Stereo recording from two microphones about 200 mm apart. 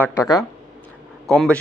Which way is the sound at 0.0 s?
15° left (ahead or behind).